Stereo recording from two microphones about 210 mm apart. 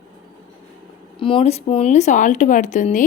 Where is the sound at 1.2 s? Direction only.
25° left (ahead or behind).